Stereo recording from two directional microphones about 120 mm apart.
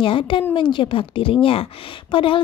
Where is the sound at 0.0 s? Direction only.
45° left (ahead or behind).